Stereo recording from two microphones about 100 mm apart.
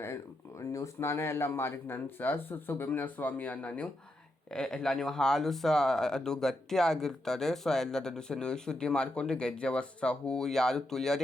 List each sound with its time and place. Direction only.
0.7 s speech: 30° left (ahead or behind); by 11.2 s 5° left (ahead or behind)